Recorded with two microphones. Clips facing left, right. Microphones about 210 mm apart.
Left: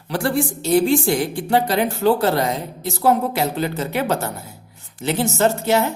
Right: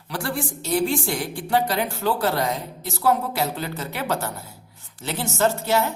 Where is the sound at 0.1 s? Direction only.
25° left (ahead or behind).